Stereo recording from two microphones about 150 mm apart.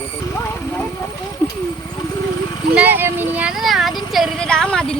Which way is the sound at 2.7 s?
10° right (ahead or behind).